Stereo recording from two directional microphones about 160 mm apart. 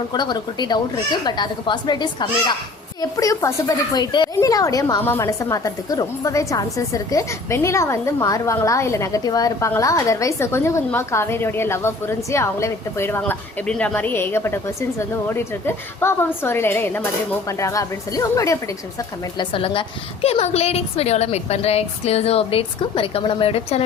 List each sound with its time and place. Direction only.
0.1 s a child's voice: 25° left (ahead or behind)
19.4 s a woman's voice: 35° left (ahead or behind)